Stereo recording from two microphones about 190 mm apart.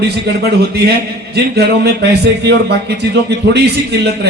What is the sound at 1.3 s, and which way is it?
A man's voice, 60° right (ahead or behind).